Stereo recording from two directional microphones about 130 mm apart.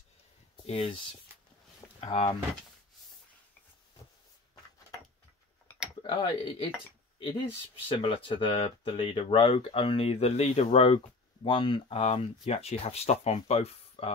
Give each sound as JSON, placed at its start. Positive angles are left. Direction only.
{"t": 0.7, "sound": "speech", "side_deg": 45}
{"t": 6.0, "sound": "speech", "side_deg": 40}
{"t": 11.4, "sound": "speech", "side_deg": 40}